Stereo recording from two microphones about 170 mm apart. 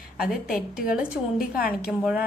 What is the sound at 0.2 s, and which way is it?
A woman's voice, centre (ahead or behind).